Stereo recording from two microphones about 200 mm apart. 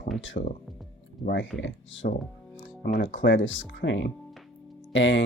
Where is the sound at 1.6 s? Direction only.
70° left (ahead or behind).